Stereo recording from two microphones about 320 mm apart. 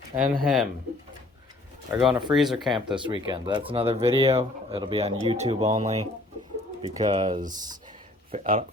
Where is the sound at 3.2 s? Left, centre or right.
Centre.